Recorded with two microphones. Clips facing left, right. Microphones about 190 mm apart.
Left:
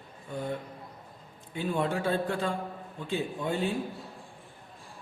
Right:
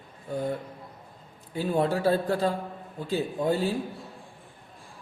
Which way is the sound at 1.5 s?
35° right (ahead or behind).